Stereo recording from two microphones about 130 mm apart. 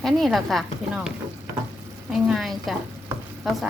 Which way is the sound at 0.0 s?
Centre (ahead or behind).